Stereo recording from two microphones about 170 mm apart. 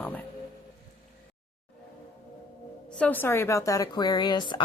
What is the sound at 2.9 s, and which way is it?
Speech, 10° left (ahead or behind).